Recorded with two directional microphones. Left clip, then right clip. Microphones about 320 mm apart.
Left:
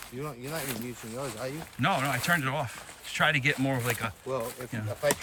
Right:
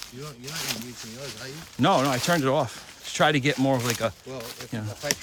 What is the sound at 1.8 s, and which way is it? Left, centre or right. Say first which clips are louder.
Speech: right 6 dB; centre.